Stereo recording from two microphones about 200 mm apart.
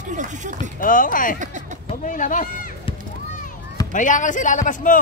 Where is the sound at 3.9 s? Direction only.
40° left (ahead or behind).